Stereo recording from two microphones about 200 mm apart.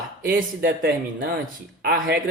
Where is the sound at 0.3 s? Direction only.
55° right (ahead or behind).